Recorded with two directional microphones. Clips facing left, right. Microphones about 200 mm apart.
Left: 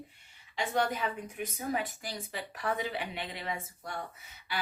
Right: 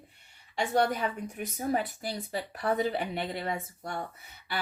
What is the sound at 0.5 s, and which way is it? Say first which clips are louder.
Speech: right 4 dB; 45° right (ahead or behind).